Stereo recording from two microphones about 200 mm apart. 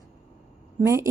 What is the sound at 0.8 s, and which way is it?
Speech, 15° right (ahead or behind).